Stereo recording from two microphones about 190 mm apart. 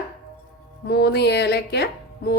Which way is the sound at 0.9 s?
60° left (ahead or behind).